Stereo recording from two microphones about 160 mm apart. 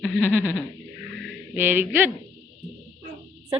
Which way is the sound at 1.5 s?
15° right (ahead or behind).